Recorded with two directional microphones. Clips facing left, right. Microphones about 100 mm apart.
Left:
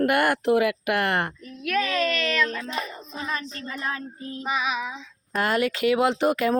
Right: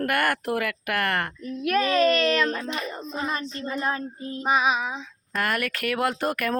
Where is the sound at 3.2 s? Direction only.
25° right (ahead or behind).